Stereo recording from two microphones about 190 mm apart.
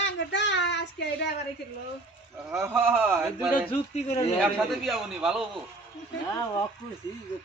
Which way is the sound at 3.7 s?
35° left (ahead or behind).